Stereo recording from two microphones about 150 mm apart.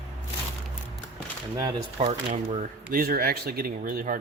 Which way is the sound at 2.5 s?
70° right (ahead or behind).